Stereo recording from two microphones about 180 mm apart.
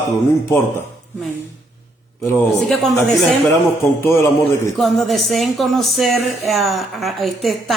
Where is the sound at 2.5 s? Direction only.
Centre (ahead or behind).